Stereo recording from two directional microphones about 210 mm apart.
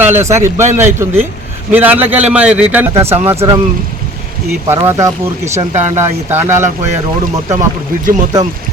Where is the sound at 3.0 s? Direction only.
30° right (ahead or behind).